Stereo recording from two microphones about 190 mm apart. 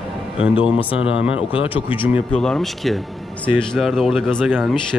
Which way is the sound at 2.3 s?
5° left (ahead or behind).